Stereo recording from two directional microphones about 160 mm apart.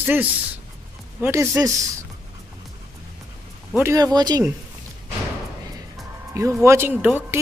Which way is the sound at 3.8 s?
20° right (ahead or behind).